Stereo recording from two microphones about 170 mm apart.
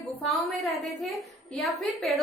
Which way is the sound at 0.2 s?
Centre (ahead or behind).